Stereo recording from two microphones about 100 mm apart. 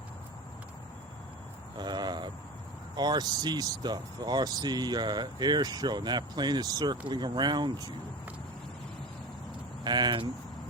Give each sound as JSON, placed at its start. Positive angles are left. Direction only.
{"t": 1.8, "sound": "a sound", "side_deg": -45}
{"t": 2.9, "sound": "speech", "side_deg": -45}
{"t": 9.8, "sound": "speech", "side_deg": -45}